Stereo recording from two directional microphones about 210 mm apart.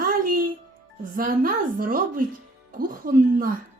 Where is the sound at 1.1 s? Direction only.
40° right (ahead or behind).